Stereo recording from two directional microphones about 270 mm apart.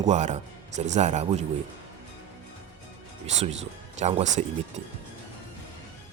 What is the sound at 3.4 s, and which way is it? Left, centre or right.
Speech, right.